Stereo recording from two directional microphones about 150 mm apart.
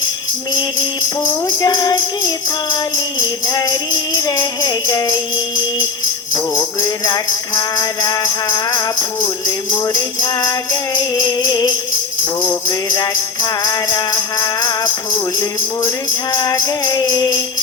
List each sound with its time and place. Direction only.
1.5 s music: 25° left (ahead or behind)
3.2 s music: 25° left (ahead or behind)
6.3 s music: 25° left (ahead or behind)
12.9 s music: 30° left (ahead or behind)
16.3 s music: 25° left (ahead or behind)